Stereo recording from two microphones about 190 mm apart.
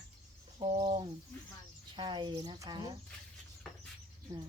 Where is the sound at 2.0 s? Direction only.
25° right (ahead or behind).